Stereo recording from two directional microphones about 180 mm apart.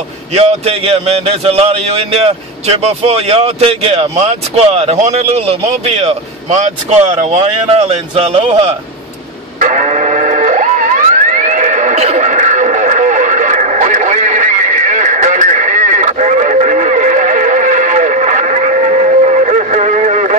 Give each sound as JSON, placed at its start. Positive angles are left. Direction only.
{"t": 0.3, "sound": "a man's voice", "side_deg": -35}
{"t": 9.6, "sound": "music", "side_deg": -45}